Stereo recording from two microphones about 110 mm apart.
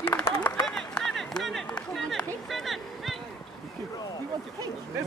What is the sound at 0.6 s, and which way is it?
Run, 5° left (ahead or behind).